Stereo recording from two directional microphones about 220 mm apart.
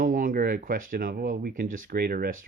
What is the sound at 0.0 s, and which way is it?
Speech, 40° right (ahead or behind).